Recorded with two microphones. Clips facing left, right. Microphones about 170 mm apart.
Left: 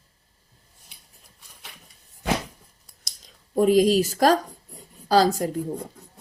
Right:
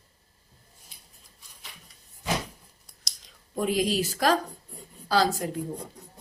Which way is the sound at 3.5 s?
40° left (ahead or behind).